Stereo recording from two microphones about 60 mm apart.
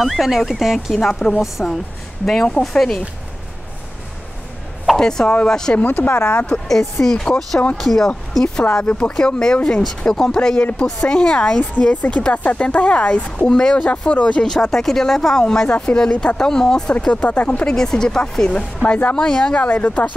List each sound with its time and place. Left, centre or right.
0.0 s speech: centre
0.9 s speech: centre
4.9 s speech: centre
5.8 s speech: left
7.0 s speech: centre
17.0 s speech: left
18.8 s speech: left